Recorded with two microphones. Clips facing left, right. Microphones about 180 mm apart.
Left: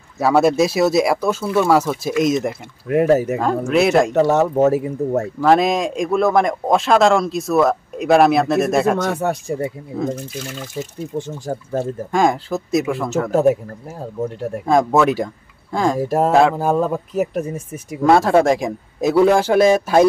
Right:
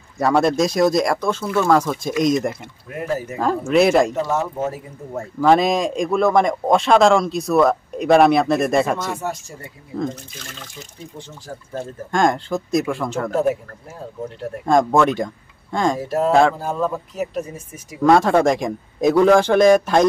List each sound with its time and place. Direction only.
0.2 s speech: 5° left (ahead or behind)
2.9 s speech: 70° left (ahead or behind)
3.3 s speech: centre (ahead or behind)
4.1 s speech: 70° left (ahead or behind)
5.4 s speech: centre (ahead or behind)
9.1 s speech: 60° left (ahead or behind)
11.1 s speech: 50° left (ahead or behind)
12.1 s speech: 5° left (ahead or behind)
13.3 s speech: 45° left (ahead or behind)
14.7 s speech: 5° left (ahead or behind)
16.5 s speech: 50° left (ahead or behind)
18.0 s speech: 5° left (ahead or behind)